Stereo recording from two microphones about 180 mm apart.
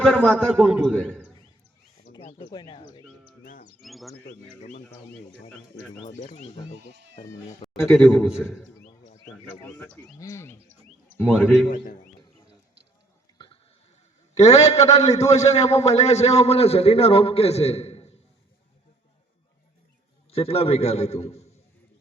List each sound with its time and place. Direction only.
0.0 s a man's voice: 5° left (ahead or behind)
0.6 s a man's voice: 5° right (ahead or behind)
0.9 s a man's voice: 5° left (ahead or behind)
2.4 s speech: 25° left (ahead or behind)
3.4 s chirp: 50° left (ahead or behind)
3.8 s bird: centre (ahead or behind)
6.0 s speech: 40° left (ahead or behind)
6.7 s speech: 70° right (ahead or behind)
7.6 s a sound: 35° left (ahead or behind)
7.9 s a man's voice: 5° left (ahead or behind)
9.7 s a sound: 5° left (ahead or behind)
11.2 s a man's voice: 10° left (ahead or behind)
14.3 s a man's voice: 40° left (ahead or behind)
20.3 s a man's voice: 35° left (ahead or behind)